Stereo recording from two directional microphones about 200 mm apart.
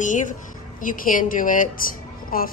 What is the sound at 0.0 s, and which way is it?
A woman's voice, 40° left (ahead or behind).